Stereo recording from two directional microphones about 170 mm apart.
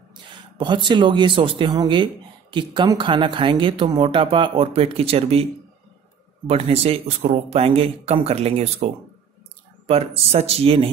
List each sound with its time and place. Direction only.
0.1 s speech: 30° right (ahead or behind)